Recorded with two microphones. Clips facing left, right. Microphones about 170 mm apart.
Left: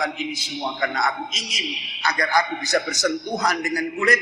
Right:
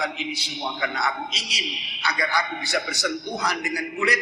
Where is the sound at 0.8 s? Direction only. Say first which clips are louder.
Left 3 dB; 50° left (ahead or behind).